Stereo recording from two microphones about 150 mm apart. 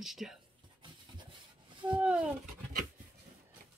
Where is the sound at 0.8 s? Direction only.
30° right (ahead or behind).